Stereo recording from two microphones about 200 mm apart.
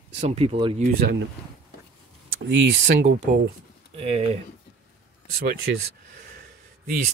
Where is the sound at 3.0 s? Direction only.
35° right (ahead or behind).